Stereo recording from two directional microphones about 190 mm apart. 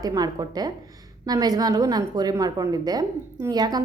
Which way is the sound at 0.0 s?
20° right (ahead or behind).